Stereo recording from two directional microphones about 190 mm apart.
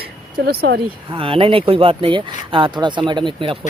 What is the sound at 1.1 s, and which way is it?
Speech, 30° right (ahead or behind).